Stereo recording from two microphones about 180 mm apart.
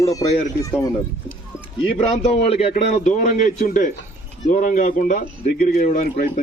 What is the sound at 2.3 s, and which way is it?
A man's voice, 35° left (ahead or behind).